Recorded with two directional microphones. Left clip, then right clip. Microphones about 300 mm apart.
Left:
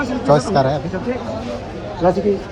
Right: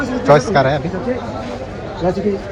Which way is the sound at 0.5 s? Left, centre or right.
Centre.